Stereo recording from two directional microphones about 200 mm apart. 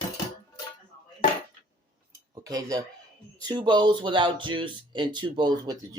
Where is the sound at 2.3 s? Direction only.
15° right (ahead or behind).